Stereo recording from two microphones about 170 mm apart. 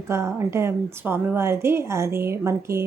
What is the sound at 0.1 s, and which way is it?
A woman's voice, 15° right (ahead or behind).